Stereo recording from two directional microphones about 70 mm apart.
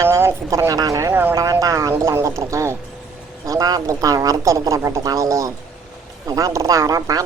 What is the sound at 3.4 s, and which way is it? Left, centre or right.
A woman's voice, right.